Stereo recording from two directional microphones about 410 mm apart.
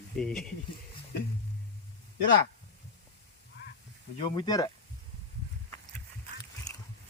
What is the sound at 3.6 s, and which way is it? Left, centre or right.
Hiss, left.